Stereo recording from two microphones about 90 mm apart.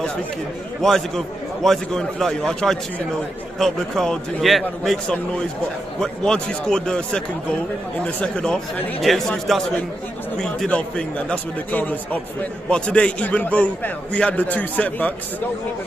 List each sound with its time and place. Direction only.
0.8 s a man's voice: 5° left (ahead or behind)
10.4 s a man's voice: 10° left (ahead or behind)